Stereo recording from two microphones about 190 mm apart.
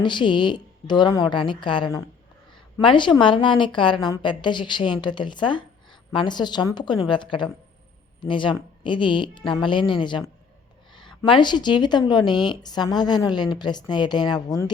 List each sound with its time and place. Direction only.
0.0 s a woman's voice: 25° left (ahead or behind)